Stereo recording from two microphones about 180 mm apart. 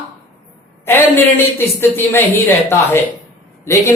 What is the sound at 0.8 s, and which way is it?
Speech, 10° left (ahead or behind).